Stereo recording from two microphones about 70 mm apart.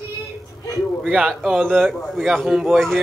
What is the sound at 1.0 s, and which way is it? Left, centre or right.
Speech, centre.